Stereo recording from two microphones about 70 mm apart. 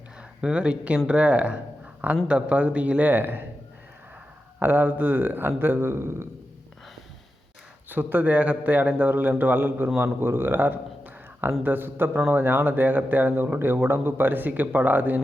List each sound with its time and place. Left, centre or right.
0.2 s a man's voice: centre
4.6 s a man's voice: right
7.9 s a man's voice: right